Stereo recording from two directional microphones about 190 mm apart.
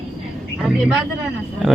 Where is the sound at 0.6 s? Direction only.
Centre (ahead or behind).